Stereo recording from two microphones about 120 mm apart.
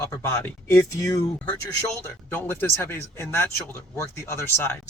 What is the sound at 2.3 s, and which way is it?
Speech, 15° left (ahead or behind).